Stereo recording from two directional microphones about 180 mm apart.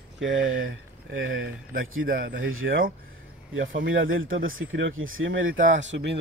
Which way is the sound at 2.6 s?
75° right (ahead or behind).